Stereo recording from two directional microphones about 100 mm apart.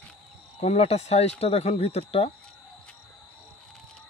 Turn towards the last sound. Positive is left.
turn(degrees=90)